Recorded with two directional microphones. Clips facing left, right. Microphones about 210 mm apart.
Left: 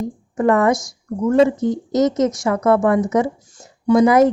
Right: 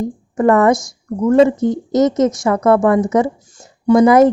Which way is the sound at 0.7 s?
25° right (ahead or behind).